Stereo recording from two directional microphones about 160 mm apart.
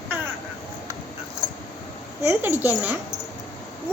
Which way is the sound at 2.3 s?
15° right (ahead or behind).